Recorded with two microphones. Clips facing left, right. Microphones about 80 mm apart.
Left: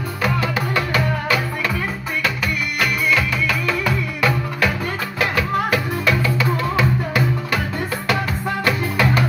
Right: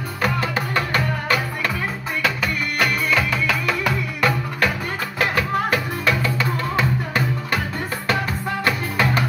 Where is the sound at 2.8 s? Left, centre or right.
Right.